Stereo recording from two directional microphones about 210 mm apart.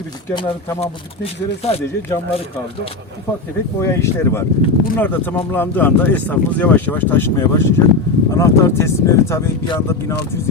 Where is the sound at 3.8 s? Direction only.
15° left (ahead or behind).